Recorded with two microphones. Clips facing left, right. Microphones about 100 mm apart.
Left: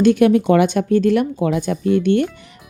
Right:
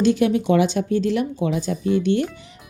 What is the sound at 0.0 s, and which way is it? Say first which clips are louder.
Speech: left 5 dB; 55° left (ahead or behind).